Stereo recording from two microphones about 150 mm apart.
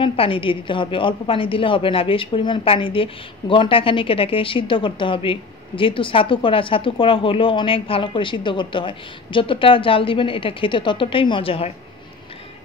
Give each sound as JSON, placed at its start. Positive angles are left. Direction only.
{"t": 0.0, "sound": "a woman's voice", "side_deg": 35}